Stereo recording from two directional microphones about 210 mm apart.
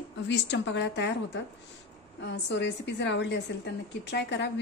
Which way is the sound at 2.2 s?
55° left (ahead or behind).